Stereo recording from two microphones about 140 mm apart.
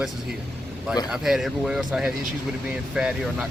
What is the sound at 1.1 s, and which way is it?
Speech, centre (ahead or behind).